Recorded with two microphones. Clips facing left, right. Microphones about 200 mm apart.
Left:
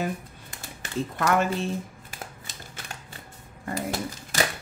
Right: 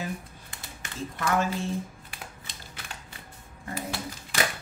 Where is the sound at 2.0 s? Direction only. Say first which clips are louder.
Left 3 dB; 45° left (ahead or behind).